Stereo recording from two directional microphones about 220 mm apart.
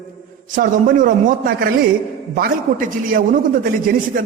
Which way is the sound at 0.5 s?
40° right (ahead or behind).